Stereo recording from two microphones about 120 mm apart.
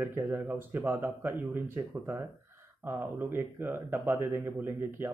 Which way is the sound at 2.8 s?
15° right (ahead or behind).